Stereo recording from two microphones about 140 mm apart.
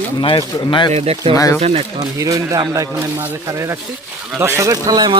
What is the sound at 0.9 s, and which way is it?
Speech, 45° right (ahead or behind).